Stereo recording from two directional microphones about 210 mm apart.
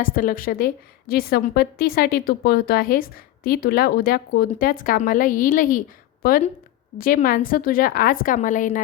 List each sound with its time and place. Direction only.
0.0 s a woman's voice: 40° left (ahead or behind)